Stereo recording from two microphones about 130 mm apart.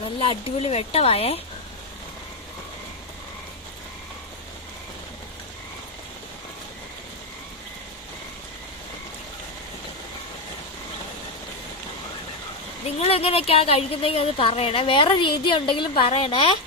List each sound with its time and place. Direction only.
0.0 s a woman's voice: 45° left (ahead or behind)
13.0 s a woman's voice: 50° left (ahead or behind)